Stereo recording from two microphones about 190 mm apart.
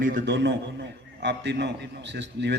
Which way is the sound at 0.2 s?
65° right (ahead or behind).